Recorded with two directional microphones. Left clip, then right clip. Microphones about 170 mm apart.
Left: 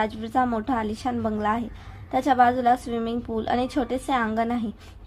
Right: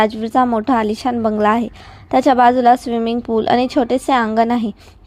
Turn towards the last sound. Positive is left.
turn(degrees=-45)  # may be behind; listen again after turning